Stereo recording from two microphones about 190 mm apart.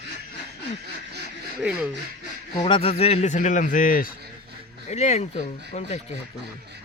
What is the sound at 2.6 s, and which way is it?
A man's voice, 25° left (ahead or behind).